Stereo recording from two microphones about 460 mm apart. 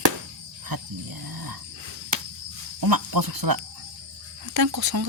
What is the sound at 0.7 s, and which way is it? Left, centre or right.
Speech, right.